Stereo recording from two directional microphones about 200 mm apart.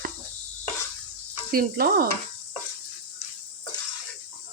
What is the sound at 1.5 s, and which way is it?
Speech, 45° right (ahead or behind).